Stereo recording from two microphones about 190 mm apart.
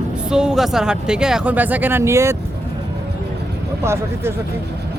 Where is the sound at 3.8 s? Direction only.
15° right (ahead or behind).